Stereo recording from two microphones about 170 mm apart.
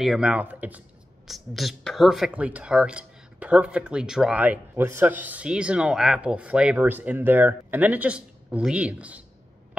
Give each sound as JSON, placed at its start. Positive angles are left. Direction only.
{"t": 0.0, "sound": "speech", "side_deg": -5}